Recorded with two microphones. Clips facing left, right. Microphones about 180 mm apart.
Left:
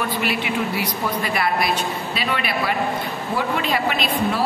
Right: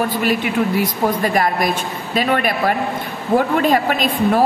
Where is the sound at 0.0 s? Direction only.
40° right (ahead or behind).